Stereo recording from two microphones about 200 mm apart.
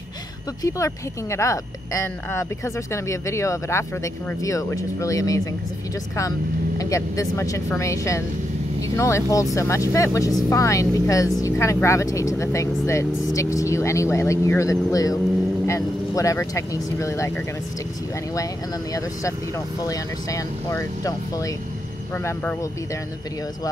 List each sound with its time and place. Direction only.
0.6 s speech: 15° left (ahead or behind)
6.8 s speech: 15° left (ahead or behind)
19.8 s speech: 15° left (ahead or behind)